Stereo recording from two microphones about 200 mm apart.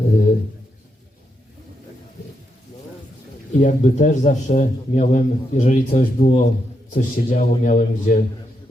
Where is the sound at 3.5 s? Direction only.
40° left (ahead or behind).